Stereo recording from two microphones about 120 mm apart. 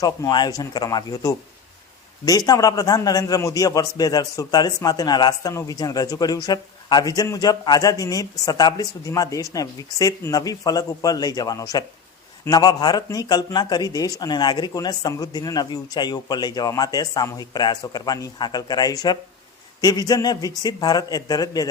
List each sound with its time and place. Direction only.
0.0 s a man's voice: 35° left (ahead or behind)
2.5 s a man's voice: 30° left (ahead or behind)